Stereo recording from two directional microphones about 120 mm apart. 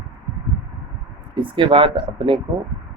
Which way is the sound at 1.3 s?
45° right (ahead or behind).